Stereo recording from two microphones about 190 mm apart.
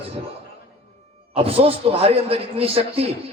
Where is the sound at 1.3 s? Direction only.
30° right (ahead or behind).